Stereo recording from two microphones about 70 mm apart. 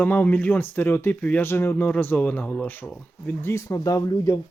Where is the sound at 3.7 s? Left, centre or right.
Left.